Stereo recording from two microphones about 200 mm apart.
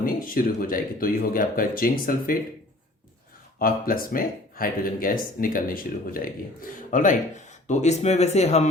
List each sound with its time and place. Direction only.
0.0 s speech: 45° left (ahead or behind)
3.6 s speech: 45° left (ahead or behind)